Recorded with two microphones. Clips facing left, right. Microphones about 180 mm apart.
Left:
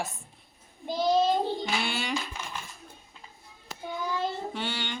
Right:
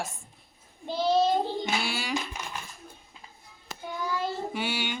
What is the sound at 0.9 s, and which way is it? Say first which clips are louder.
Speech: even; 15° left (ahead or behind).